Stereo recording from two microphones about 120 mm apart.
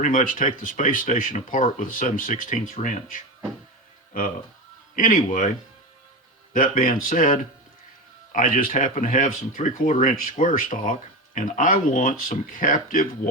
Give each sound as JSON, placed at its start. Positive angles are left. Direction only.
{"t": 0.0, "sound": "speech", "side_deg": 90}
{"t": 4.9, "sound": "speech", "side_deg": 90}
{"t": 6.5, "sound": "speech", "side_deg": 90}